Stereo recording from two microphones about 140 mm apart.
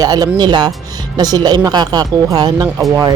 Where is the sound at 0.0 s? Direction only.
30° right (ahead or behind).